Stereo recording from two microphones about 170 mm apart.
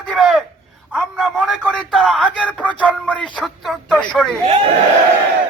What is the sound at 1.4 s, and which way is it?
Speech, 5° right (ahead or behind).